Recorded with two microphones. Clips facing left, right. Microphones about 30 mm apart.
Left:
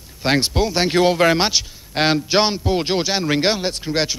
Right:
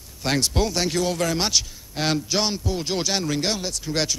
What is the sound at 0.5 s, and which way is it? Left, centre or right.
Speech, centre.